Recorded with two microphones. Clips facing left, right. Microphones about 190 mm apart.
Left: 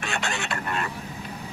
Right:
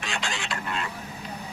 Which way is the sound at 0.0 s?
60° left (ahead or behind).